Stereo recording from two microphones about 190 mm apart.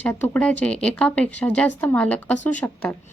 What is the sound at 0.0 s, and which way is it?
A woman's voice, 5° left (ahead or behind).